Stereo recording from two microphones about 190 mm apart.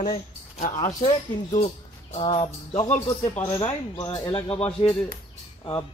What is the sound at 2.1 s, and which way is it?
Speech, 30° left (ahead or behind).